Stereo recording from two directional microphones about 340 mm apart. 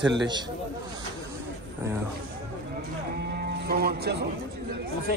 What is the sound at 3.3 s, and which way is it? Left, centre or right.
Music, right.